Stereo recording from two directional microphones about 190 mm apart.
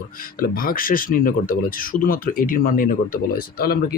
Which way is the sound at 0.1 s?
50° left (ahead or behind).